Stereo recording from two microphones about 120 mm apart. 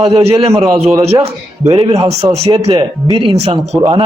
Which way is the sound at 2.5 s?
40° right (ahead or behind).